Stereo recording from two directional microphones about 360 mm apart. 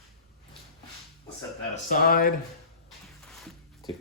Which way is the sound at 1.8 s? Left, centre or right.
Left.